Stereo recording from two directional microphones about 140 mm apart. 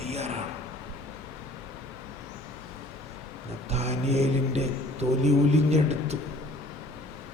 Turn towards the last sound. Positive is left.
turn(degrees=-50)  # may be behind; listen again after turning